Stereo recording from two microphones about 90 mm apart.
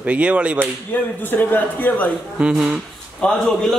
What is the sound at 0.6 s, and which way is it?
Speech, 20° left (ahead or behind).